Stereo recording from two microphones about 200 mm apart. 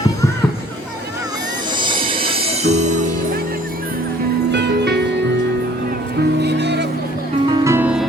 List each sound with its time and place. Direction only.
1.8 s music: 25° right (ahead or behind)
4.5 s music: 60° right (ahead or behind)
6.1 s music: 55° right (ahead or behind)
7.4 s music: 20° right (ahead or behind)